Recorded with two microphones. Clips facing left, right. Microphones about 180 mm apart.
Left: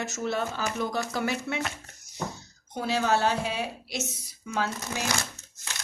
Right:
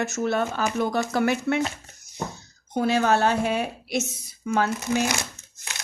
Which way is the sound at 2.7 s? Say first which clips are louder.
Right 5 dB; 55° right (ahead or behind).